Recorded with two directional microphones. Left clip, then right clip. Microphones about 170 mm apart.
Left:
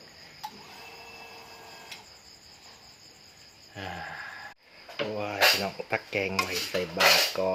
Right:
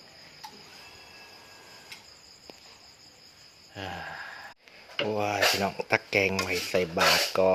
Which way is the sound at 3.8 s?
20° right (ahead or behind).